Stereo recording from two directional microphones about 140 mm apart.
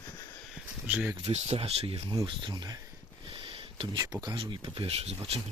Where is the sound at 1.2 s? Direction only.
50° right (ahead or behind).